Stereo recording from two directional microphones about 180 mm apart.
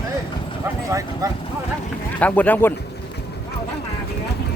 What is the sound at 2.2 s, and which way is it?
Speech, 10° left (ahead or behind).